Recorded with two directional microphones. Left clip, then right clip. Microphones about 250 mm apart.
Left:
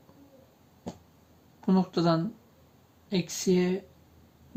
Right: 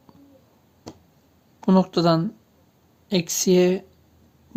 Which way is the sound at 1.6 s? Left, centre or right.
Right.